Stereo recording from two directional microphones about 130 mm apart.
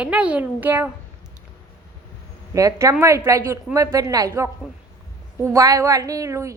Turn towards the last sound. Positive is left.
turn(degrees=-25)  # may be behind; listen again after turning